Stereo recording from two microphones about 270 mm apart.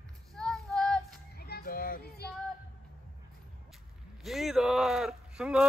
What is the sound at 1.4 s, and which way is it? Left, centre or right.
Child singing, left.